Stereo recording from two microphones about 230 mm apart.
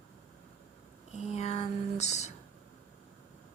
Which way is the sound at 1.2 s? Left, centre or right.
Left.